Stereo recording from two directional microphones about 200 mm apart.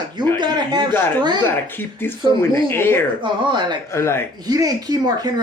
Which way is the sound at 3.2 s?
25° right (ahead or behind).